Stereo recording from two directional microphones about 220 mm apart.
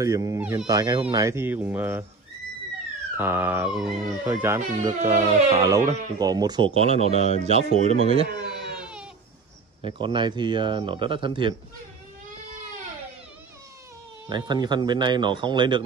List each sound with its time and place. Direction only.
0.0 s speech: 15° right (ahead or behind)
3.2 s speech: 10° right (ahead or behind); by 7.2 s 25° right (ahead or behind)
7.2 s speech: 30° left (ahead or behind)
7.4 s speech: 30° right (ahead or behind)
8.5 s baby cry: 5° right (ahead or behind)
9.8 s speech: 20° right (ahead or behind)
14.3 s speech: 20° right (ahead or behind)